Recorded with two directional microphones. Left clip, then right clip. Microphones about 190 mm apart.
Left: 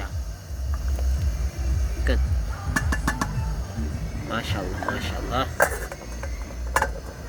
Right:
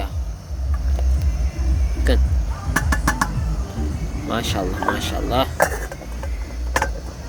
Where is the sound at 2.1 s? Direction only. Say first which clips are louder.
Right 6 dB; 20° right (ahead or behind).